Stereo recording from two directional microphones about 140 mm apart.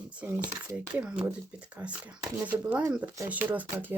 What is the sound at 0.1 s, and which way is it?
Speech, 10° right (ahead or behind).